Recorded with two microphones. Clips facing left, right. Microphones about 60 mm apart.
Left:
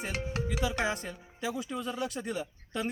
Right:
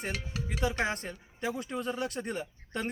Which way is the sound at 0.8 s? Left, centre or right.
Right.